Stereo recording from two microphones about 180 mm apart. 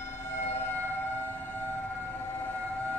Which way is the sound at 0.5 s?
10° left (ahead or behind).